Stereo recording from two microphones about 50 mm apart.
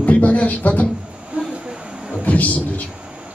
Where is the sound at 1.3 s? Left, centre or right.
Right.